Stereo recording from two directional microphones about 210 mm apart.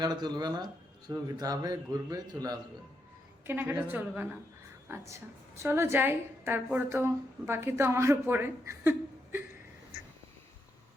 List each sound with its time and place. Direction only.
0.0 s a woman's voice: 20° right (ahead or behind)
5.5 s a woman's voice: 10° right (ahead or behind)